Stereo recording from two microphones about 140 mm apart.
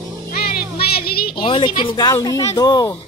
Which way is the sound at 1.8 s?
30° left (ahead or behind).